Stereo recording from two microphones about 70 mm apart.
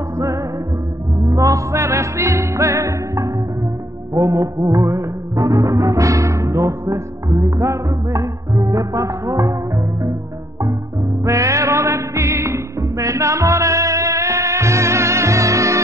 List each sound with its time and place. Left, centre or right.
1.2 s music: right
4.1 s music of bollywood: right
11.2 s music: right